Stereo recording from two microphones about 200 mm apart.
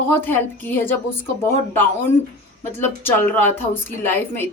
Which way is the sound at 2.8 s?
10° left (ahead or behind).